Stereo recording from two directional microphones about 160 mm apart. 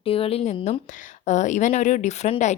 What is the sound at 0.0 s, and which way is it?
A woman's voice, 35° left (ahead or behind).